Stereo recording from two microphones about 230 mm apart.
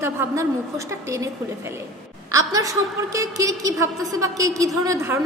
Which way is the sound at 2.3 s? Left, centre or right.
Centre.